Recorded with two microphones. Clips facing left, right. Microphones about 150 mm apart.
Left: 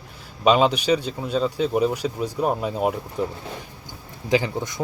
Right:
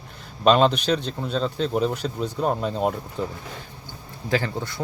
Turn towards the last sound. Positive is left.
turn(degrees=15)  # may be behind; listen again after turning